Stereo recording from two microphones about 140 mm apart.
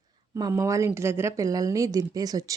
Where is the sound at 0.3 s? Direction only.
25° right (ahead or behind).